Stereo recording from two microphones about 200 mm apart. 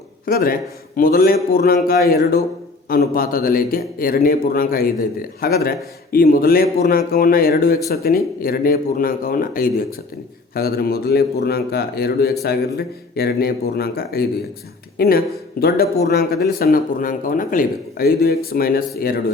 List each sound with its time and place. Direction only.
0.3 s a man's voice: 45° left (ahead or behind)